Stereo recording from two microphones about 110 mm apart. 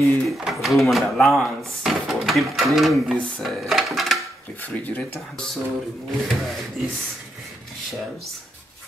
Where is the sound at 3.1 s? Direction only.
10° left (ahead or behind).